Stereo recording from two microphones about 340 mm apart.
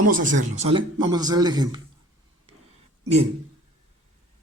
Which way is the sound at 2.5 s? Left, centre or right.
Centre.